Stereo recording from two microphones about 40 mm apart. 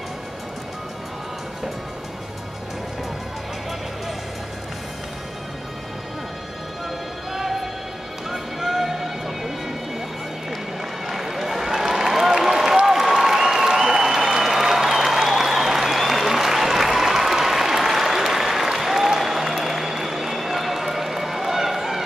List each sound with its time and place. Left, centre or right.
7.3 s music: centre
8.3 s a sound: centre
11.1 s run: centre
12.8 s applause: centre